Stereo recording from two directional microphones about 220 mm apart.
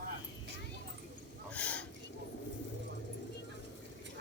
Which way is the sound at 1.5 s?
5° left (ahead or behind).